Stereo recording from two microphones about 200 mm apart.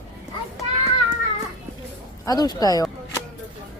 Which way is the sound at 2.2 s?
20° left (ahead or behind).